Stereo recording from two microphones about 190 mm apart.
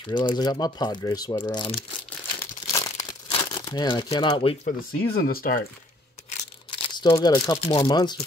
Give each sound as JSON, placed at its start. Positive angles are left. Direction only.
{"t": 0.1, "sound": "speech", "side_deg": 25}
{"t": 2.7, "sound": "crumpling", "side_deg": 20}
{"t": 4.6, "sound": "speech", "side_deg": 55}
{"t": 6.7, "sound": "speech", "side_deg": 25}